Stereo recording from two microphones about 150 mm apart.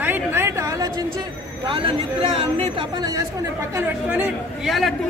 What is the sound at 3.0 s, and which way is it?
Speech, 25° right (ahead or behind).